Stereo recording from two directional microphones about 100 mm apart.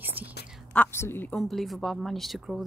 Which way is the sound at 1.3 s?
Centre (ahead or behind).